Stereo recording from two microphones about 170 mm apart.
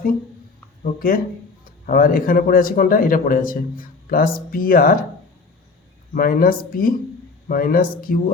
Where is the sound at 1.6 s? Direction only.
55° left (ahead or behind).